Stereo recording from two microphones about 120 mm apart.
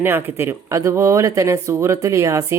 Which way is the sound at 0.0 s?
20° right (ahead or behind).